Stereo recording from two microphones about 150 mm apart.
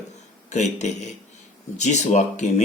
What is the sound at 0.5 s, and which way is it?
Speech, 50° left (ahead or behind).